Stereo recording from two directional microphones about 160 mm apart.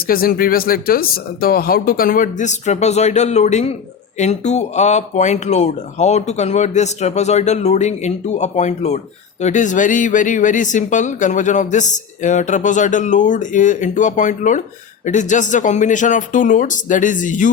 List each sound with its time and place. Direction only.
0.0 s speech: 65° left (ahead or behind)